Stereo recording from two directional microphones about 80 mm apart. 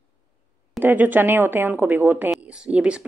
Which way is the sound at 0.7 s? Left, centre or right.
Right.